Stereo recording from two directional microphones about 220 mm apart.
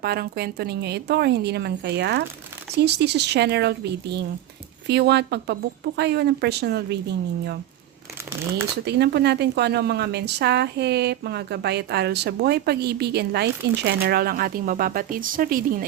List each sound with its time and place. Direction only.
0.0 s speech: 45° right (ahead or behind)
8.8 s speech: 50° right (ahead or behind)